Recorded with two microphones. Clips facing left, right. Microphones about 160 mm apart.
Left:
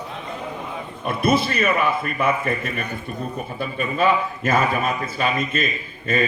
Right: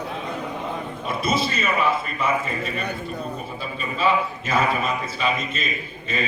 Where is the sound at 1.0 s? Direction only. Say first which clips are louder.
Left 5 dB; 60° left (ahead or behind).